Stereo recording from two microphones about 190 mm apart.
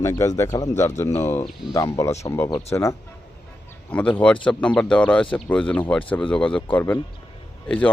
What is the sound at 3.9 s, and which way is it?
A man's voice, 5° left (ahead or behind).